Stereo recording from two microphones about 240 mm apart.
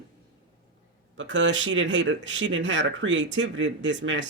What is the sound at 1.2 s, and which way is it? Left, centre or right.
Speech, right.